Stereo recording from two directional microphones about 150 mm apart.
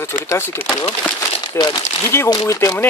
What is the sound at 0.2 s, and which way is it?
Speech, 15° left (ahead or behind).